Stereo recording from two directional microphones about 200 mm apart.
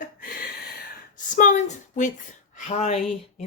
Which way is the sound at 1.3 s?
40° left (ahead or behind).